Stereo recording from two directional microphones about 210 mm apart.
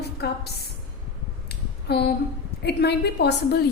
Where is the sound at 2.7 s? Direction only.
50° left (ahead or behind).